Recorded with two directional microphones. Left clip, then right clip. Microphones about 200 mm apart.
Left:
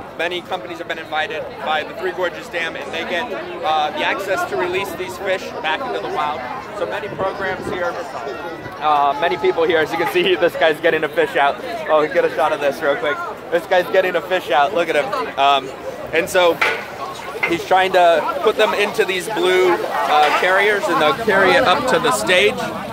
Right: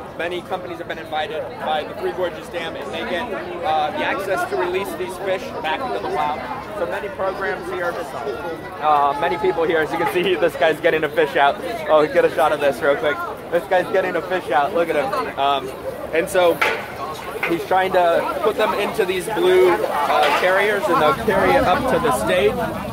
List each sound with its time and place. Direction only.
0.2 s speech: 25° left (ahead or behind)
1.7 s speech: 15° left (ahead or behind)
5.3 s speech: 40° left (ahead or behind)
8.8 s speech: 45° left (ahead or behind); by 11.5 s 25° left (ahead or behind)
11.9 s a man's voice: 10° left (ahead or behind)
12.8 s speech: 30° left (ahead or behind)
13.5 s speech: 50° left (ahead or behind)
15.3 s speech: 40° left (ahead or behind)
17.6 s speech: 50° left (ahead or behind)